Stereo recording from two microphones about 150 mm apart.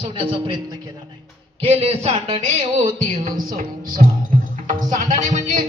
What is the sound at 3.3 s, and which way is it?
Speech, 65° right (ahead or behind).